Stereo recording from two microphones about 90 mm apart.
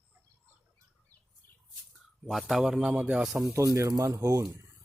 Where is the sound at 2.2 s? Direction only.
Centre (ahead or behind).